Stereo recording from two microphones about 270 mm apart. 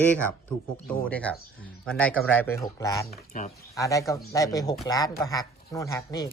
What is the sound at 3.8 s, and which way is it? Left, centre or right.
Speech, centre.